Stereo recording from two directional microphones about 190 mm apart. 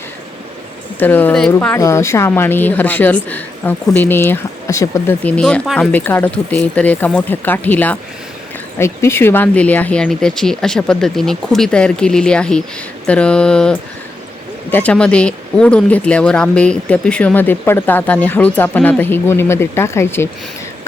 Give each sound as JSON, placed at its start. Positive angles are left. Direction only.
{"t": 0.9, "sound": "speech", "side_deg": 10}